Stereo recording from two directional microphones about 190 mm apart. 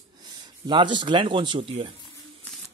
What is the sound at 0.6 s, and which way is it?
A man's voice, 25° right (ahead or behind).